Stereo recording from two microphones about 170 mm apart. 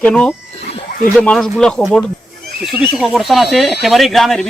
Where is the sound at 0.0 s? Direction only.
5° left (ahead or behind).